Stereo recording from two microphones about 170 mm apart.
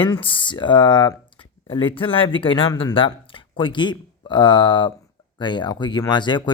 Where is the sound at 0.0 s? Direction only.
30° left (ahead or behind).